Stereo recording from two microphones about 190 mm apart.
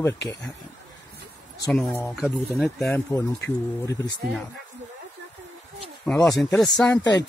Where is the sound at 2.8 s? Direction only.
15° left (ahead or behind).